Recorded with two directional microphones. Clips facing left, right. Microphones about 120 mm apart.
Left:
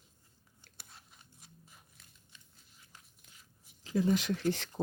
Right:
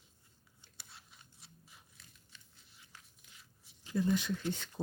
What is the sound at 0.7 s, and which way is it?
Biting, 45° left (ahead or behind).